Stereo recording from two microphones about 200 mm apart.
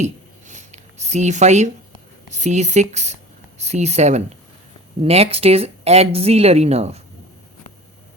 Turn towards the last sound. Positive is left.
turn(degrees=-30)  # may be behind; listen again after turning